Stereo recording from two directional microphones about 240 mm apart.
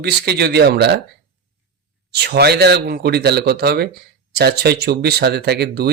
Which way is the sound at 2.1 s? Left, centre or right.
Right.